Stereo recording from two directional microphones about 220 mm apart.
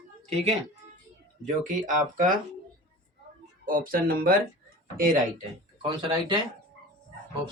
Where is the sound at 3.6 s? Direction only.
40° right (ahead or behind).